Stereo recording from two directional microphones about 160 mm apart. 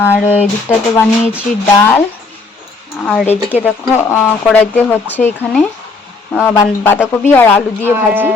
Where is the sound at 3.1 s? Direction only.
5° left (ahead or behind).